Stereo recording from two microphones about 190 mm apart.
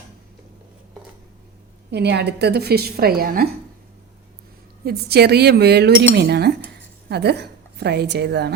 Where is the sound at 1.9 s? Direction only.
60° right (ahead or behind).